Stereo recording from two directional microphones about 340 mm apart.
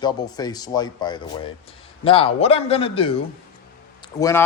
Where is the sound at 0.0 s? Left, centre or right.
Centre.